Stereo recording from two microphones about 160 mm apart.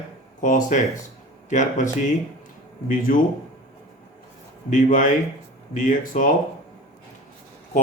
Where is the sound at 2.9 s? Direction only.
60° left (ahead or behind).